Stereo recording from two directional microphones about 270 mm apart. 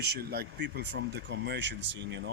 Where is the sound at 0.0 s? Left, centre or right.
Right.